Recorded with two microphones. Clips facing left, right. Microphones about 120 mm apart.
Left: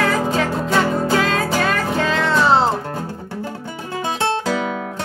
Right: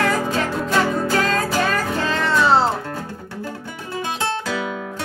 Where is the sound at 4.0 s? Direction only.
30° left (ahead or behind).